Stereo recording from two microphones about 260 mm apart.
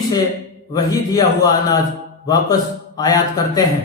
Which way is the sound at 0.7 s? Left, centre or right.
Centre.